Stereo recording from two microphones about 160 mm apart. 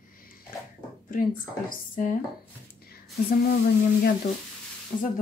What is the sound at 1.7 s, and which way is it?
Speech, 60° left (ahead or behind).